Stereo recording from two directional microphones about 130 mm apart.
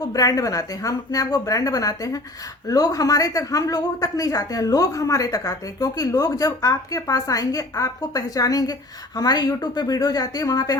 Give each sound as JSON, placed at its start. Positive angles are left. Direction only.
{"t": 0.1, "sound": "a woman's voice", "side_deg": 25}